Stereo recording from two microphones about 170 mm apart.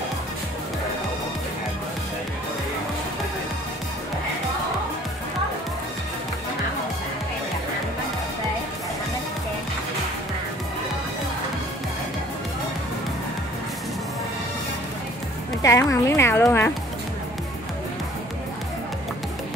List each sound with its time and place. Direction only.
15.6 s speech: 20° left (ahead or behind)